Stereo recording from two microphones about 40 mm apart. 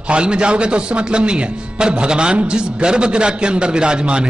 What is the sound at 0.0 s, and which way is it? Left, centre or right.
A man's voice, right.